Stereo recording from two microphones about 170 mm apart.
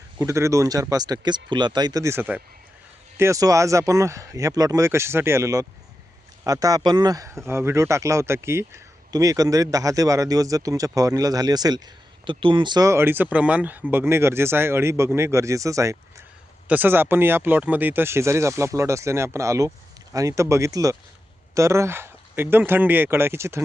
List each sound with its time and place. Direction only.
0.2 s speech: 15° right (ahead or behind)